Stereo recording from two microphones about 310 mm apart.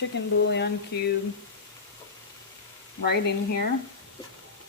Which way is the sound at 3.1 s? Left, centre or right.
Left.